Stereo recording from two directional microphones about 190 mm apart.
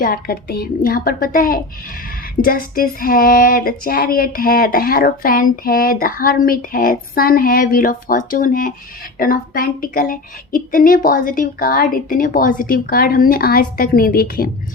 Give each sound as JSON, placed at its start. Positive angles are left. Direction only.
{"t": 0.0, "sound": "child singing", "side_deg": 50}